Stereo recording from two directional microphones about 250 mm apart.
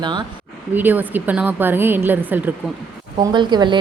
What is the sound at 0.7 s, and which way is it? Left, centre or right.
A woman's voice, centre.